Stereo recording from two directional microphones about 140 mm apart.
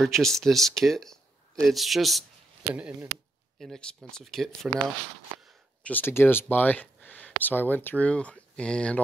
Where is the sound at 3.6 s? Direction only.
5° left (ahead or behind).